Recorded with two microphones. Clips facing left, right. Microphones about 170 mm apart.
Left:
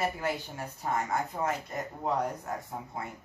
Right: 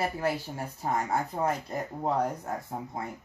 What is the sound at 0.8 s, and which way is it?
Speech, 30° right (ahead or behind).